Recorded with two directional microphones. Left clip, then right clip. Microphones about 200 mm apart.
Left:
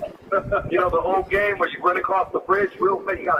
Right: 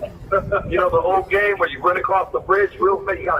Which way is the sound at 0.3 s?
15° right (ahead or behind).